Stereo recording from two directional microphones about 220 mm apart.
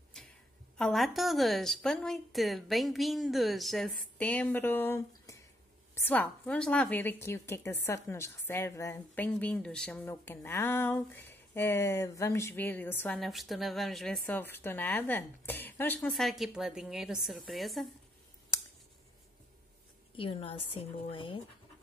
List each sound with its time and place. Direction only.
0.2 s a sound: 5° left (ahead or behind)
0.7 s a woman's voice: centre (ahead or behind)
20.2 s a woman's voice: 25° left (ahead or behind)